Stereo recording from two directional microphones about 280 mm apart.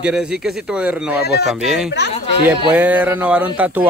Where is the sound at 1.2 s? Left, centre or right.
Left.